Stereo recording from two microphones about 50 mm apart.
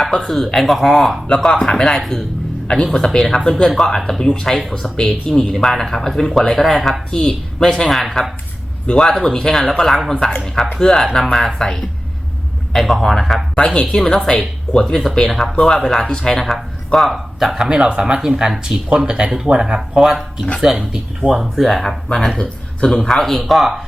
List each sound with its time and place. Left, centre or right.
0.0 s speech: centre
17.5 s speech: centre
20.7 s speech: centre
21.3 s speech: centre
22.4 s speech: centre